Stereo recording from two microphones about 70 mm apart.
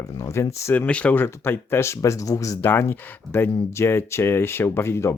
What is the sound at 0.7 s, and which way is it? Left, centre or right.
Speech, centre.